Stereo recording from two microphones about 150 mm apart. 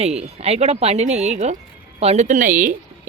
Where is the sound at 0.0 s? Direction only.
45° right (ahead or behind).